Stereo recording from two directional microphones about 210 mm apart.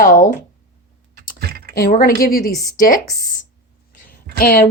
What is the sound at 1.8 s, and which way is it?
Speech, 45° left (ahead or behind).